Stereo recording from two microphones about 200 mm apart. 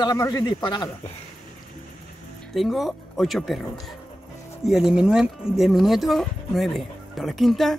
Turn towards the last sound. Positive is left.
turn(degrees=0)  # may be behind; listen again after turning